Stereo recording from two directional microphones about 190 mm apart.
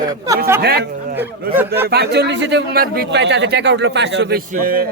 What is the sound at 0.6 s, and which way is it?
Speech, 55° right (ahead or behind).